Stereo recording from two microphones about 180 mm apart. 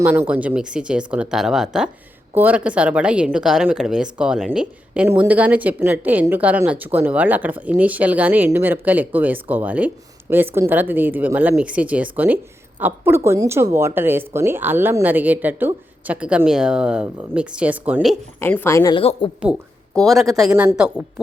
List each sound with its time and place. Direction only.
0.3 s a woman's voice: 5° right (ahead or behind)
18.3 s a woman's voice: 10° left (ahead or behind)
19.4 s speech: centre (ahead or behind)